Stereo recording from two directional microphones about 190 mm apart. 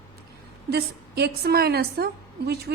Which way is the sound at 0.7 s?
55° right (ahead or behind).